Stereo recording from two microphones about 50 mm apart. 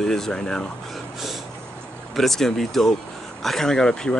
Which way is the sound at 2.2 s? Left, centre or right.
Centre.